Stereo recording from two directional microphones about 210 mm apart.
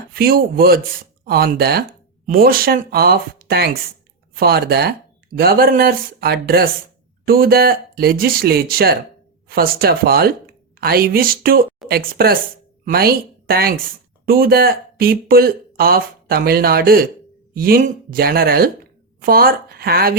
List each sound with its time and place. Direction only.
0.1 s a woman's voice: 45° right (ahead or behind)